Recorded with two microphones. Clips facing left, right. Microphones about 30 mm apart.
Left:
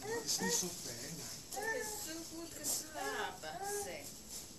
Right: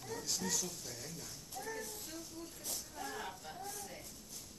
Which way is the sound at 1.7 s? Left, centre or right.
Left.